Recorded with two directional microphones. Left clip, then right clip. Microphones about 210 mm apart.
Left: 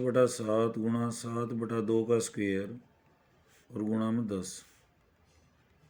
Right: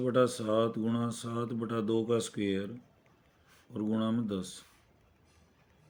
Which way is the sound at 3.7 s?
5° left (ahead or behind).